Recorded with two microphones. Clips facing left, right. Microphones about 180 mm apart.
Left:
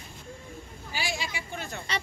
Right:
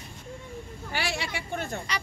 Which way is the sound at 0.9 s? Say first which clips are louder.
Right 2 dB; 70° right (ahead or behind).